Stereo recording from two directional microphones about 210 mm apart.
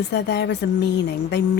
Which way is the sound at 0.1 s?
50° left (ahead or behind).